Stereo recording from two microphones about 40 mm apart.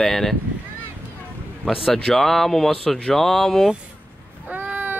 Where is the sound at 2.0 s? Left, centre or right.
Centre.